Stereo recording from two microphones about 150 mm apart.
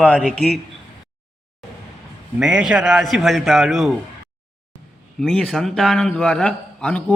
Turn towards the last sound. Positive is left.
turn(degrees=5)  # may be behind; listen again after turning